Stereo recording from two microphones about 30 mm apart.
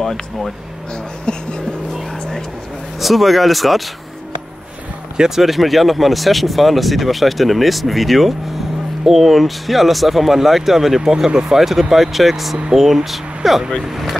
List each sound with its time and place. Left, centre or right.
1.3 s music: left
3.0 s speech: centre
5.3 s speech: centre
11.0 s speech: right; by 14.1 s centre